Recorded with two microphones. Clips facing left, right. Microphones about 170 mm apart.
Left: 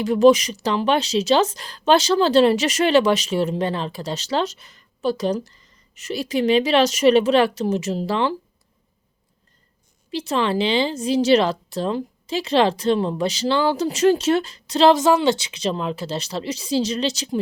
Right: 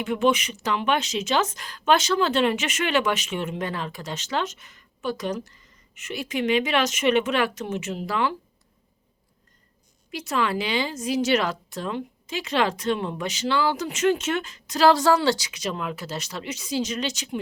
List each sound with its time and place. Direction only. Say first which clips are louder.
0.0 s a woman's voice: left 8 dB; 35° left (ahead or behind)
10.1 s a woman's voice: left 4 dB; 30° left (ahead or behind)